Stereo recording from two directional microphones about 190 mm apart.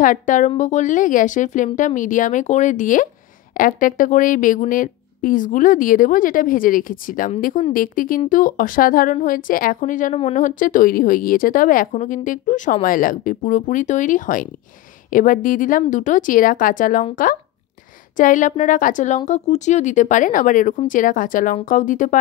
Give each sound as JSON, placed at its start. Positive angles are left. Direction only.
{"t": 0.0, "sound": "a woman's voice", "side_deg": 45}